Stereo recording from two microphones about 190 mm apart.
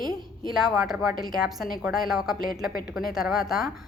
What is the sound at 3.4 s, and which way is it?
Speech, centre (ahead or behind).